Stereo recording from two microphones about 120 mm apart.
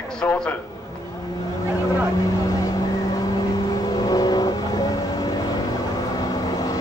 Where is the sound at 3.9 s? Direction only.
30° left (ahead or behind).